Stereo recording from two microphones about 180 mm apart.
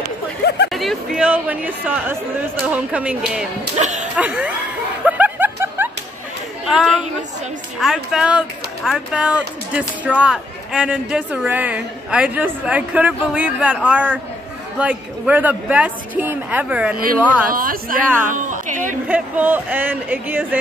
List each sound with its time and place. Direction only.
0.7 s speech: centre (ahead or behind)
3.7 s speech: 40° right (ahead or behind)
4.2 s speech: 10° right (ahead or behind)
5.0 s snicker: 10° right (ahead or behind)
6.7 s speech: 5° right (ahead or behind)
17.5 s a woman's voice: 50° right (ahead or behind)
19.0 s speech: 10° right (ahead or behind)